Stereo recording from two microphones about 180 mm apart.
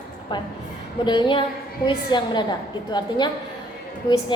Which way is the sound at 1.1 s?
25° left (ahead or behind).